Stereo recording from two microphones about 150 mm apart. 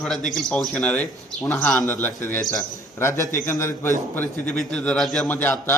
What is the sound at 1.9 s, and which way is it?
A man's voice, 15° left (ahead or behind).